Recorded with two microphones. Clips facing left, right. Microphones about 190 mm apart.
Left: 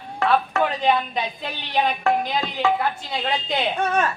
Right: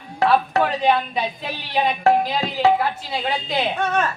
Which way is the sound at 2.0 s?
35° right (ahead or behind).